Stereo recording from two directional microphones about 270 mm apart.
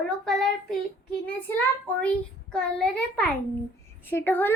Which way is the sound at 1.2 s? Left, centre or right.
Centre.